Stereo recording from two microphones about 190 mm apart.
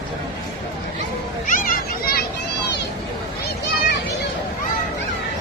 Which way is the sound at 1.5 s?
45° left (ahead or behind).